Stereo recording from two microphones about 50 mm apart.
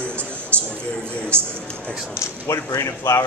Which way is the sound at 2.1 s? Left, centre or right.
Left.